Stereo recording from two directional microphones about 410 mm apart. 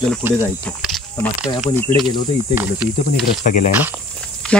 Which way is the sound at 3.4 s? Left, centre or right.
Centre.